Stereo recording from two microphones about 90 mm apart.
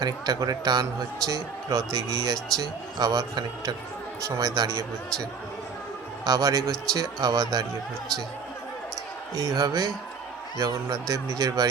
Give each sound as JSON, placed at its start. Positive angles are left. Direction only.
{"t": 0.0, "sound": "a man's voice", "side_deg": -45}
{"t": 6.2, "sound": "a man's voice", "side_deg": -40}
{"t": 9.3, "sound": "a man's voice", "side_deg": -40}